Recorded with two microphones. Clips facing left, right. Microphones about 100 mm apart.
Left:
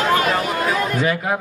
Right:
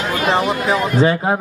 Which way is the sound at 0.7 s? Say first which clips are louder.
Right 6 dB; 30° right (ahead or behind).